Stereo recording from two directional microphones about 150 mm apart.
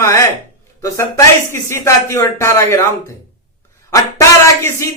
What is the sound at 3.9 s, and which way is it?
Speech, 20° left (ahead or behind).